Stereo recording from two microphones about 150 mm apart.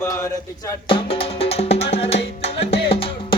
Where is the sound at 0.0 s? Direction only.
15° left (ahead or behind).